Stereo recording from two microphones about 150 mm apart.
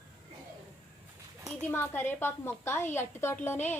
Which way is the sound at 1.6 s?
10° left (ahead or behind).